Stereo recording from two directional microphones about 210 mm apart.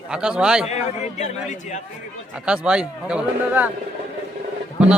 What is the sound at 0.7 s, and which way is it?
A man's voice, 35° left (ahead or behind).